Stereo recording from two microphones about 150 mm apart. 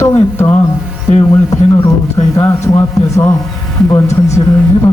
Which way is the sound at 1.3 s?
20° left (ahead or behind).